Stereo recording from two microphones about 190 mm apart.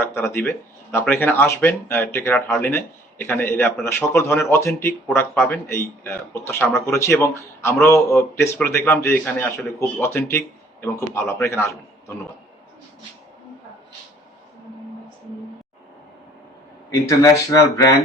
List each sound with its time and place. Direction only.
0.0 s speech: 15° left (ahead or behind)
16.9 s speech: 20° left (ahead or behind)